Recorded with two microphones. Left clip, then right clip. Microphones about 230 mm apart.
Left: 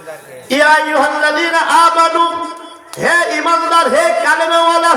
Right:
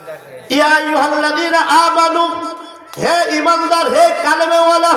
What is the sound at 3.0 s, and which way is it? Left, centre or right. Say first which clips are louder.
A man's voice: left 1 dB; centre.